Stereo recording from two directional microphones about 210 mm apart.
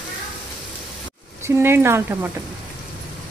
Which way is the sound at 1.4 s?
10° right (ahead or behind).